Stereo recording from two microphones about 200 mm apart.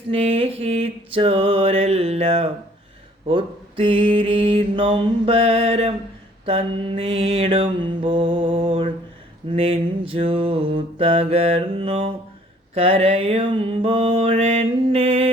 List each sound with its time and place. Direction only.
0.1 s mantra: 30° right (ahead or behind)